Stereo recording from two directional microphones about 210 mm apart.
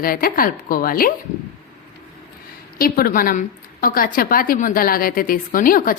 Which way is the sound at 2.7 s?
45° left (ahead or behind).